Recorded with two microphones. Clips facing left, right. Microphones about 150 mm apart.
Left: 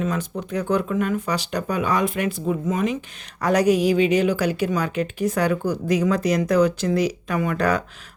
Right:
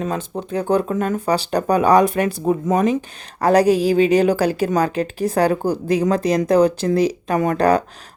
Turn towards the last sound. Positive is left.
turn(degrees=-35)  # may be behind; listen again after turning